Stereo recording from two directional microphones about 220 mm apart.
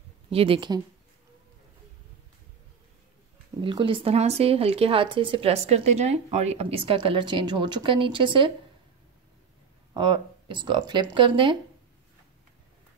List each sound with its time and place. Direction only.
0.3 s speech: 25° right (ahead or behind)
3.6 s speech: 25° right (ahead or behind)
9.9 s speech: 20° right (ahead or behind)